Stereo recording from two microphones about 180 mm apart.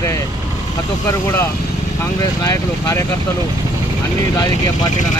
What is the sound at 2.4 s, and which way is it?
Speech, 20° left (ahead or behind).